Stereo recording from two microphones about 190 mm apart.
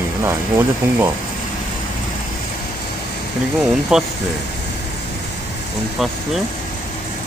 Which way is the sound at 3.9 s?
5° right (ahead or behind).